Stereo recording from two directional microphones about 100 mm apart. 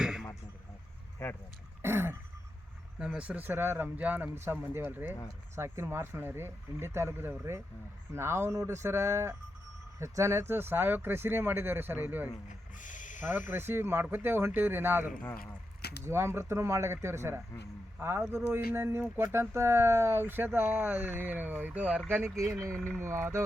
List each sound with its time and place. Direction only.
0.0 s a sound: 5° right (ahead or behind)
1.2 s speech: 25° left (ahead or behind)
1.8 s throat clearing: 25° right (ahead or behind)
3.0 s speech: 10° right (ahead or behind)
13.5 s speech: 25° right (ahead or behind)
22.1 s speech: 25° right (ahead or behind)
22.7 s speech: 10° left (ahead or behind)
23.0 s speech: 25° right (ahead or behind)